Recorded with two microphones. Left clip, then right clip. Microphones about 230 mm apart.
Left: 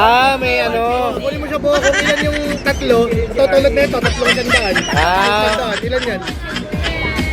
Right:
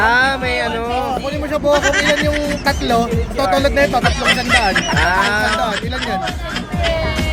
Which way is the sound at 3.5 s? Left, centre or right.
Right.